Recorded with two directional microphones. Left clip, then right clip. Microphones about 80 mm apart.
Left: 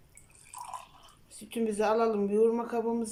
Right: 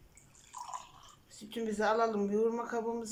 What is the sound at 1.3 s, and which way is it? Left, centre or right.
Speech, left.